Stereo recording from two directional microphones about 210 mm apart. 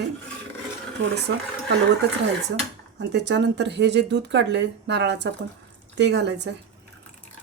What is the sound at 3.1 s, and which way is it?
Speech, 55° right (ahead or behind).